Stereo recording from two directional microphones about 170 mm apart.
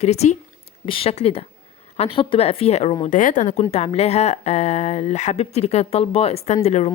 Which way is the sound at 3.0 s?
50° left (ahead or behind).